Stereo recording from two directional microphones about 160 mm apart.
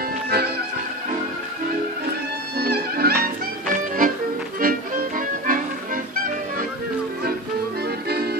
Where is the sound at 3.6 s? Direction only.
60° right (ahead or behind).